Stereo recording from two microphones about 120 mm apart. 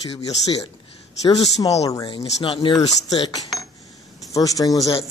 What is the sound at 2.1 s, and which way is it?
Speech, 45° left (ahead or behind).